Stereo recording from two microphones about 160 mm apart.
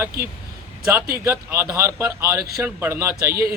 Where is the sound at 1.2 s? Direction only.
15° right (ahead or behind).